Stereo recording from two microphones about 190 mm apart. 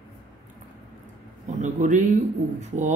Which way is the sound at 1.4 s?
40° right (ahead or behind).